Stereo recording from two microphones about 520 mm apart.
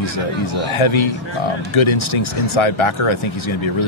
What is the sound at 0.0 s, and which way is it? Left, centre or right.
Speech, left.